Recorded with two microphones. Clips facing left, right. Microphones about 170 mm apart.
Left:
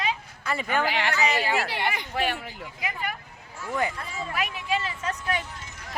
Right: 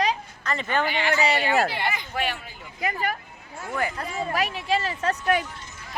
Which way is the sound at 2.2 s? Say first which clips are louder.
Left 1 dB; 25° left (ahead or behind).